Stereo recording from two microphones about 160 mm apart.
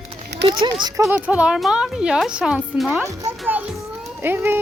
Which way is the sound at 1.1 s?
5° right (ahead or behind).